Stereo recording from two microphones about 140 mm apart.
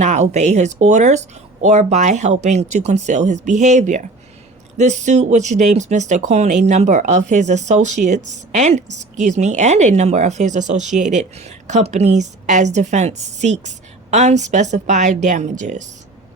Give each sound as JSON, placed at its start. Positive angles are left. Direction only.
{"t": 0.0, "sound": "speech", "side_deg": -55}